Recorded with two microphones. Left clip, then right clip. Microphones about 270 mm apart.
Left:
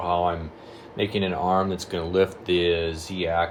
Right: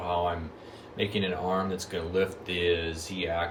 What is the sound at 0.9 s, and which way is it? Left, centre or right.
Speech, left.